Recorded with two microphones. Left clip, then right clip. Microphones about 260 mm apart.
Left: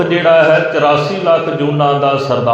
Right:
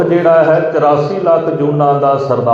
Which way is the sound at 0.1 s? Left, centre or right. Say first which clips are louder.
Left 1 dB; left.